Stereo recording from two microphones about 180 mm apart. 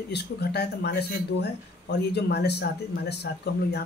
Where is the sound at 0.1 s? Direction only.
65° left (ahead or behind).